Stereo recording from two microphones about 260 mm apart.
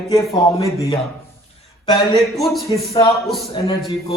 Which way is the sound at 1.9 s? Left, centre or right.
Centre.